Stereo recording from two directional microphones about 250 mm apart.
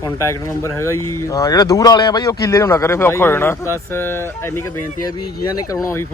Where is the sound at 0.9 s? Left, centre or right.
Left.